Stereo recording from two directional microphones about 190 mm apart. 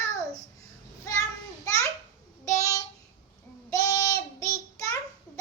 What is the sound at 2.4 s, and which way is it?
Child singing, 15° left (ahead or behind).